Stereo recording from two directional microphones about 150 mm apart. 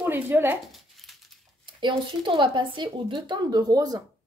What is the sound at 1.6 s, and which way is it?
Speech, 30° right (ahead or behind).